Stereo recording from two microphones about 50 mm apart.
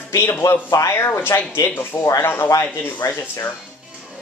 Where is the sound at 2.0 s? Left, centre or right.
Left.